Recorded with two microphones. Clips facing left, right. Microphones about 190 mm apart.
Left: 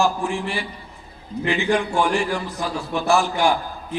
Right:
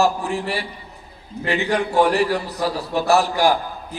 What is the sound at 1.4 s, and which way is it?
A man's voice, 40° right (ahead or behind).